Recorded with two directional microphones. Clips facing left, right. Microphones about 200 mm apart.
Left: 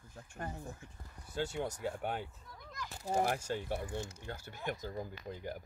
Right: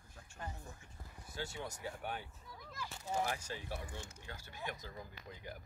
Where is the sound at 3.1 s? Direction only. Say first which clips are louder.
Left 6 dB; 50° left (ahead or behind).